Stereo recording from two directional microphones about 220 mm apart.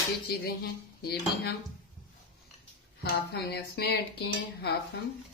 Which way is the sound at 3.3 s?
45° left (ahead or behind).